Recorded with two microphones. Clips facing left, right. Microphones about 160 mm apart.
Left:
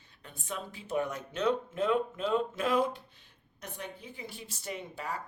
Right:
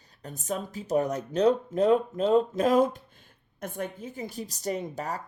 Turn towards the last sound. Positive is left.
turn(degrees=-40)  # may be behind; listen again after turning